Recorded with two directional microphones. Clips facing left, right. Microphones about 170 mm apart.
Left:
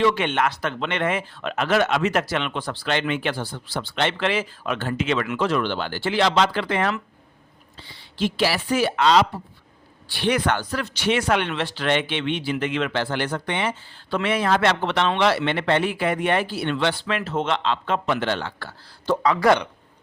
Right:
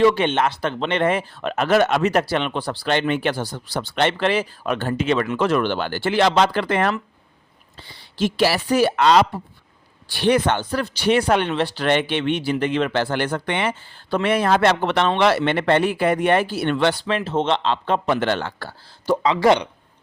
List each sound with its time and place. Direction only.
0.0 s speech: 30° right (ahead or behind)
5.4 s speech: 50° right (ahead or behind)
8.1 s speech: 40° right (ahead or behind)
9.0 s speech: 50° right (ahead or behind)
10.1 s speech: 40° right (ahead or behind)
10.3 s speech: 25° right (ahead or behind); by 13.7 s 60° right (ahead or behind)
14.1 s speech: 45° right (ahead or behind)
18.3 s speech: 45° right (ahead or behind)
19.0 s speech: 20° right (ahead or behind)